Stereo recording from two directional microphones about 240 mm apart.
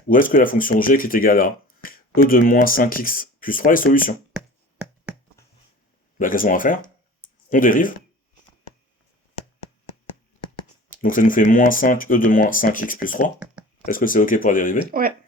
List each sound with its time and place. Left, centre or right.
0.1 s speech: left
5.4 s a sound: centre
6.1 s speech: left
10.8 s speech: left
14.8 s speech: right